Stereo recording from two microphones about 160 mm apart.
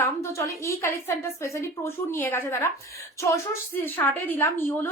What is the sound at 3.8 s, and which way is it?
A woman's voice, 10° left (ahead or behind).